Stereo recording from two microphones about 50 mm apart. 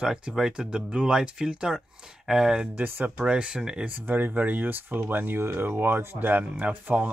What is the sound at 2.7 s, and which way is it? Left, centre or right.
Speech, right.